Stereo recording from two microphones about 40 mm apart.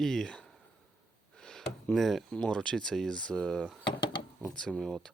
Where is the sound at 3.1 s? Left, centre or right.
Left.